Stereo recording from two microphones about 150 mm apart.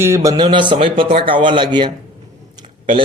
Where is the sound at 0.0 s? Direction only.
20° right (ahead or behind).